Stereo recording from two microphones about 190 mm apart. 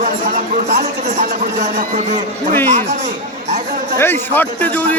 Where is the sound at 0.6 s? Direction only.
40° right (ahead or behind).